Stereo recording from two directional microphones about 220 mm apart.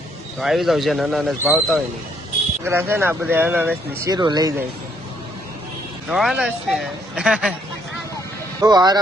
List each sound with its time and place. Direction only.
0.3 s speech: centre (ahead or behind); by 4.5 s 20° right (ahead or behind)
6.1 s speech: centre (ahead or behind)
8.6 s speech: 20° right (ahead or behind)